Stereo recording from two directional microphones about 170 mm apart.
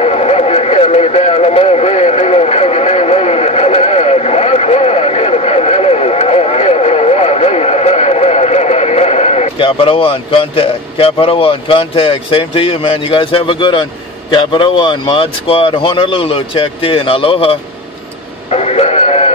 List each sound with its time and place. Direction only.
0.0 s a sound: 40° left (ahead or behind)
14.3 s speech: 30° left (ahead or behind)
18.5 s music: 40° left (ahead or behind)